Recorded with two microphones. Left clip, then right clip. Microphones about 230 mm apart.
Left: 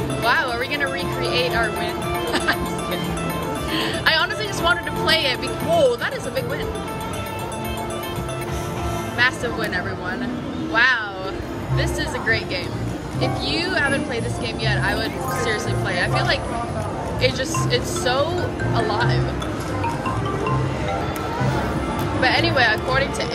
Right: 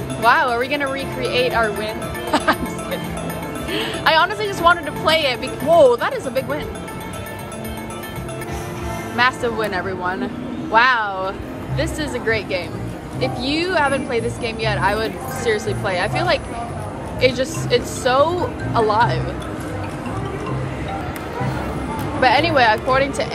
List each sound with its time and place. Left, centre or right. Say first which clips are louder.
0.2 s speech: right 5 dB; centre
9.1 s speech: right 3 dB; centre
22.2 s speech: right 4 dB; centre